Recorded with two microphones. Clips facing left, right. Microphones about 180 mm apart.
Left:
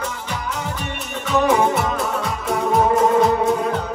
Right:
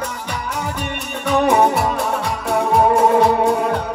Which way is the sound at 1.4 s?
60° right (ahead or behind).